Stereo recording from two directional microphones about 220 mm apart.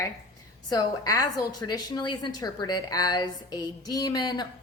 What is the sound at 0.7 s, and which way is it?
A woman's voice, 15° left (ahead or behind).